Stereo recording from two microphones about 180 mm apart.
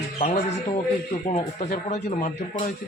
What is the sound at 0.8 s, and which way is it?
Speech, 40° left (ahead or behind).